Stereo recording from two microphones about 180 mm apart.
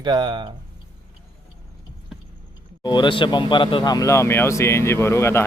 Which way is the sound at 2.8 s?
25° left (ahead or behind).